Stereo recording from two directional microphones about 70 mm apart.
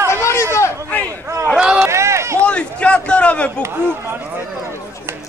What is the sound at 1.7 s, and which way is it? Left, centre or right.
Run, right.